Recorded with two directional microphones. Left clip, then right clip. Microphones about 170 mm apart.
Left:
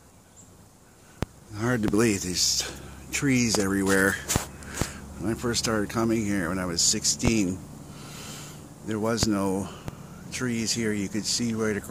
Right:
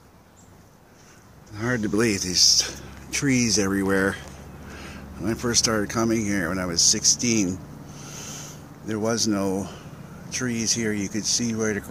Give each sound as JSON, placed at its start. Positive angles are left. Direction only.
{"t": 1.5, "sound": "speech", "side_deg": 25}
{"t": 2.1, "sound": "speech", "side_deg": 0}
{"t": 8.0, "sound": "a sound", "side_deg": -5}
{"t": 10.3, "sound": "speech", "side_deg": 0}